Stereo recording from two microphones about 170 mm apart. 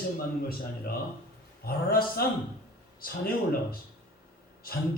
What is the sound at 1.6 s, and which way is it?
A man's voice, 60° left (ahead or behind).